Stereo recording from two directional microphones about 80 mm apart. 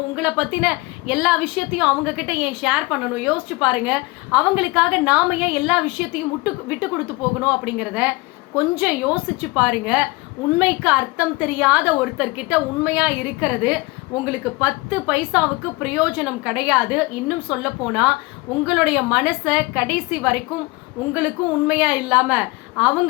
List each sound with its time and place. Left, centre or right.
0.2 s a woman's voice: centre